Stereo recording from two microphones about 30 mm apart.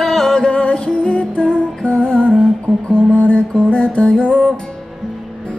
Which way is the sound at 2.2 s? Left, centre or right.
Right.